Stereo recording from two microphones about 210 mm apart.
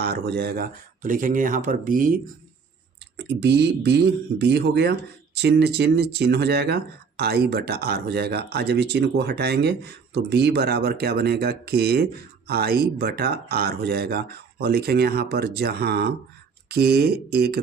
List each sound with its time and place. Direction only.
0.0 s speech: 50° right (ahead or behind)
3.2 s speech: 55° right (ahead or behind)